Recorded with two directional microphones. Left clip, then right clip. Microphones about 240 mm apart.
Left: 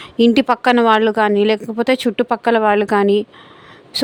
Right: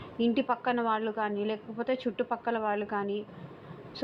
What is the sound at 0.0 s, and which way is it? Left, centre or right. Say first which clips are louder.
Speech: left 15 dB; left.